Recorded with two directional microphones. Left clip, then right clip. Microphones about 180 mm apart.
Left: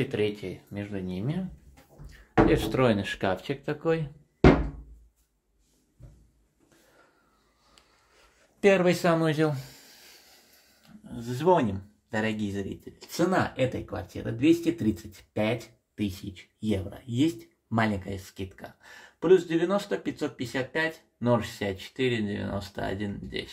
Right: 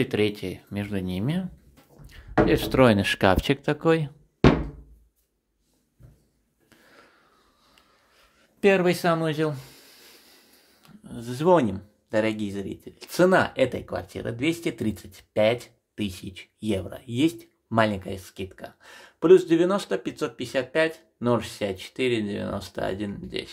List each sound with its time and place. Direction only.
0.0 s speech: 45° right (ahead or behind)
2.0 s speech: 25° right (ahead or behind)
8.2 s speech: 20° right (ahead or behind)
10.8 s speech: 35° right (ahead or behind)